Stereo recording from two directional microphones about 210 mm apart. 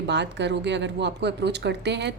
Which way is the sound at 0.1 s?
55° right (ahead or behind).